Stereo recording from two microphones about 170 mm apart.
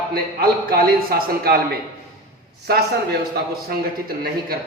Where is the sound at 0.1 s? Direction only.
60° right (ahead or behind).